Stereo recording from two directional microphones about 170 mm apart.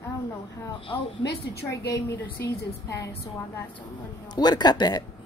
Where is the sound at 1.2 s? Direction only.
70° left (ahead or behind).